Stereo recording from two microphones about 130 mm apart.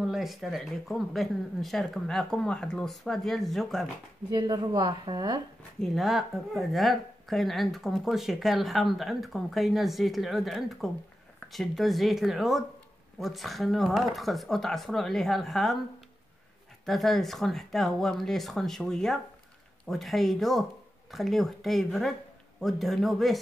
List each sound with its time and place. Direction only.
0.0 s speech: centre (ahead or behind)
4.3 s a woman's voice: 35° right (ahead or behind)
5.8 s speech: centre (ahead or behind)
16.8 s speech: centre (ahead or behind)